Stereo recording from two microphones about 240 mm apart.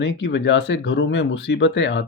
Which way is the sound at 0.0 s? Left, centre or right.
Left.